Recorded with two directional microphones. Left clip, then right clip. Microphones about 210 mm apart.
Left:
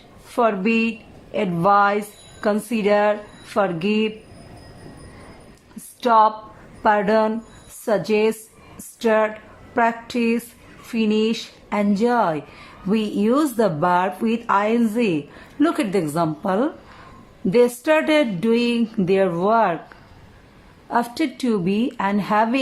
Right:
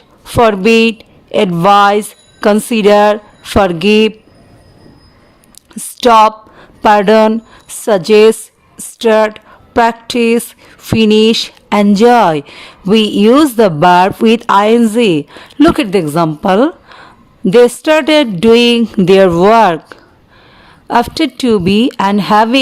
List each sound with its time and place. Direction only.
0.3 s speech: 50° right (ahead or behind)
6.0 s a woman's voice: 50° right (ahead or behind)